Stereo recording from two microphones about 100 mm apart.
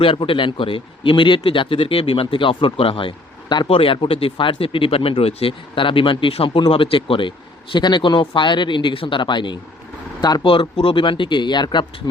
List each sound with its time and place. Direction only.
0.0 s speech: 60° left (ahead or behind)
3.7 s speech: 65° left (ahead or behind); by 10.4 s 45° left (ahead or behind)
10.4 s speech: 60° left (ahead or behind)